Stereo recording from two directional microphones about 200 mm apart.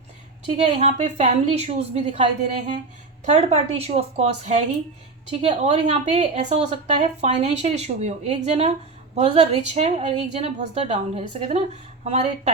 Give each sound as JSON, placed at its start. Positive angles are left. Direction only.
{"t": 0.5, "sound": "a woman's voice", "side_deg": -35}